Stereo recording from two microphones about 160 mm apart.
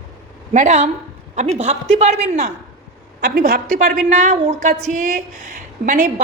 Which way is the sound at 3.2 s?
75° right (ahead or behind).